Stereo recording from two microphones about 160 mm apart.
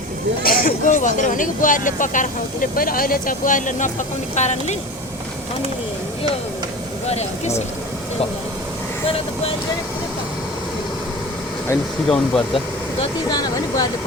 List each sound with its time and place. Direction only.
0.4 s speech: 65° left (ahead or behind)
0.9 s speech: 50° left (ahead or behind)
7.1 s speech: 40° left (ahead or behind)
12.0 s speech: 5° left (ahead or behind)
12.5 s speech: 30° left (ahead or behind)